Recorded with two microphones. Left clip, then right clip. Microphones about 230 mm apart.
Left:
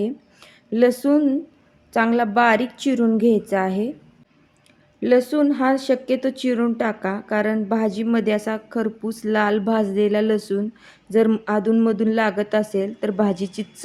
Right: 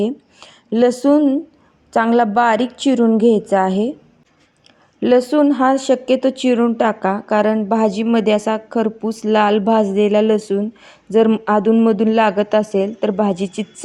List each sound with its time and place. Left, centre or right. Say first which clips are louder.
0.0 s a sound: right 5 dB; centre
1.0 s speech: right 5 dB; centre
4.9 s speech: right 4 dB; centre